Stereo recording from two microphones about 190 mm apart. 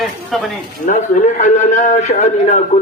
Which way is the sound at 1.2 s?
40° left (ahead or behind).